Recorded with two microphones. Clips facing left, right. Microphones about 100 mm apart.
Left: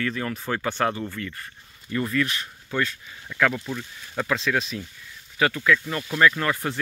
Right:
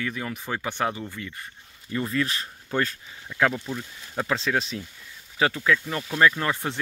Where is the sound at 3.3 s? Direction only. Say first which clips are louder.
Even; 20° right (ahead or behind).